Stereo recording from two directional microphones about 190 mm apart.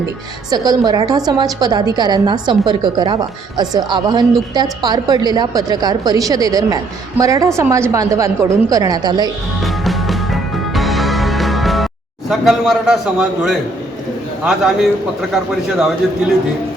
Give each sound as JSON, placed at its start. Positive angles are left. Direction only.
{"t": 0.5, "sound": "a woman's voice", "side_deg": -20}
{"t": 9.6, "sound": "music", "side_deg": 0}
{"t": 12.3, "sound": "a man's voice", "side_deg": 0}